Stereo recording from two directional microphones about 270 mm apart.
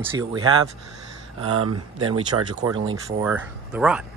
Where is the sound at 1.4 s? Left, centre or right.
Right.